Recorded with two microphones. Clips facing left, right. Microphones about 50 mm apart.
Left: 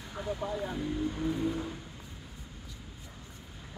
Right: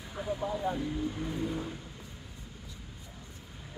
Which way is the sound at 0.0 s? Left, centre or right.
Centre.